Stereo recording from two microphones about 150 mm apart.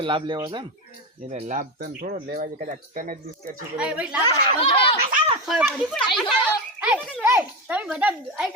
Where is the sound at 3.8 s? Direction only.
10° right (ahead or behind).